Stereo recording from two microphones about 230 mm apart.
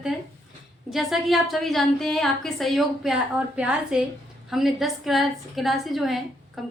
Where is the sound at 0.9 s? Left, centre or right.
Centre.